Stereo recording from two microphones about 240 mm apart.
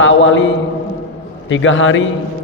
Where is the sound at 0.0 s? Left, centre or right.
Left.